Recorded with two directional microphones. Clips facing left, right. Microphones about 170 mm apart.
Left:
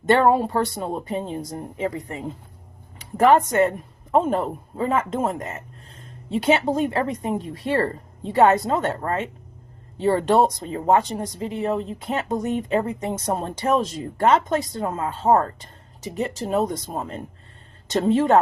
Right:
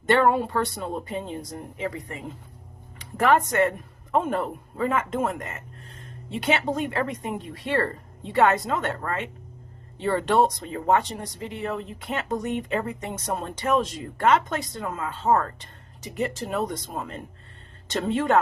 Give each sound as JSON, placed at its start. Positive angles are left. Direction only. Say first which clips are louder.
{"t": 0.1, "sound": "speech", "louder": "left 3 dB", "side_deg": 35}